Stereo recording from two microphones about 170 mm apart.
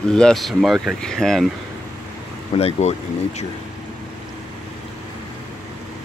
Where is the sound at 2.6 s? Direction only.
40° left (ahead or behind).